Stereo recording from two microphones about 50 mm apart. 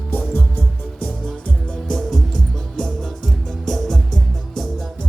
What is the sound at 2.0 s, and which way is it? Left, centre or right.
Music, centre.